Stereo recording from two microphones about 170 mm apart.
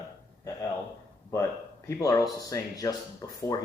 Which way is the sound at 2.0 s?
20° left (ahead or behind).